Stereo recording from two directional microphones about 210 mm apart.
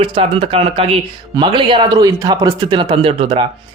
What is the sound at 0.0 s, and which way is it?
Speech, 25° right (ahead or behind).